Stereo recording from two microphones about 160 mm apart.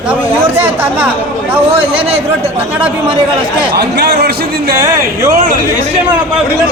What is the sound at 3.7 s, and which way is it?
A man's voice, 85° right.